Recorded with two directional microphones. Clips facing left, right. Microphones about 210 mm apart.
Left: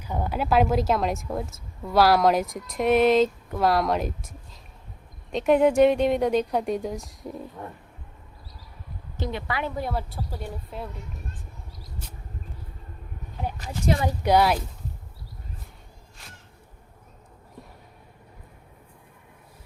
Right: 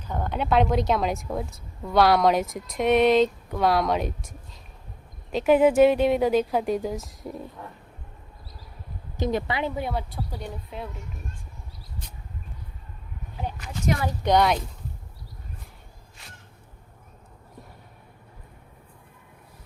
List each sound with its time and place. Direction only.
0.0 s a woman's voice: 10° left (ahead or behind)
9.5 s speech: 20° right (ahead or behind)
9.7 s a woman's voice: centre (ahead or behind)
13.6 s speech: 30° left (ahead or behind)
14.0 s speech: 10° left (ahead or behind)